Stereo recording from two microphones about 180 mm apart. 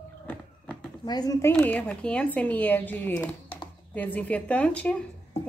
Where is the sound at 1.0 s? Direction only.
20° left (ahead or behind).